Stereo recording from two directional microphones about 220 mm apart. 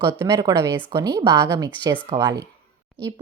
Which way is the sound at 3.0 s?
5° left (ahead or behind).